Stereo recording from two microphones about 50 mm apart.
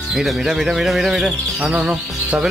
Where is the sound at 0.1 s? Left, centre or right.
Centre.